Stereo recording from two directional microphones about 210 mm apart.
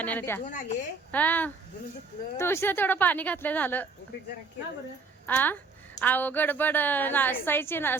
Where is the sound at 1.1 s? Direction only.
10° left (ahead or behind).